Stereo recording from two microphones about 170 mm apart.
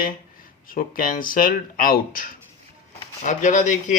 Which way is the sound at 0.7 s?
55° left (ahead or behind).